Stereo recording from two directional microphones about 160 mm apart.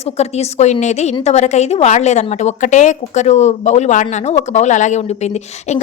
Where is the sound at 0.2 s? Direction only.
45° left (ahead or behind).